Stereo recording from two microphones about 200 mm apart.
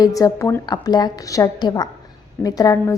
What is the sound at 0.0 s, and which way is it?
A woman's voice, 15° left (ahead or behind).